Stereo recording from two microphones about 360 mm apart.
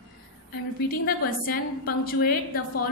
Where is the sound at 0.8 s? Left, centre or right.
Left.